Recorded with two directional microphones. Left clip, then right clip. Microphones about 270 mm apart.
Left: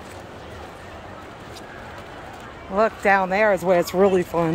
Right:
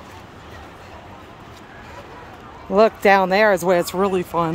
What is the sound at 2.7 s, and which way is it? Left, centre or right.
Speech, right.